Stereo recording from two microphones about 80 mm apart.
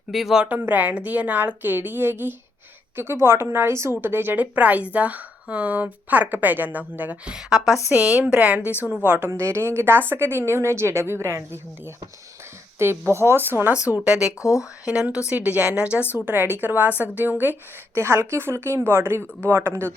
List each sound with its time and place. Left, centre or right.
0.1 s speech: centre
0.6 s a woman's voice: right
7.3 s a woman's voice: centre; by 11.6 s right
12.8 s a woman's voice: right
14.0 s speech: centre
14.4 s speech: left
14.8 s speech: centre
16.2 s a woman's voice: right